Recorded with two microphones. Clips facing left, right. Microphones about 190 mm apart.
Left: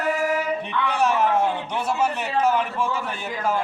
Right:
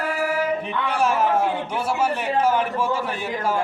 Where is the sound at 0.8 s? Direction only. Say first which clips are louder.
Even; 10° right (ahead or behind).